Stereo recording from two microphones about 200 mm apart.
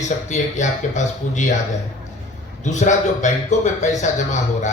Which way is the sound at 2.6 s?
35° left (ahead or behind).